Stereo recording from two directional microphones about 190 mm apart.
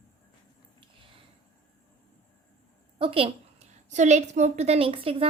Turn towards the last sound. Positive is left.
turn(degrees=-30)  # may be behind; listen again after turning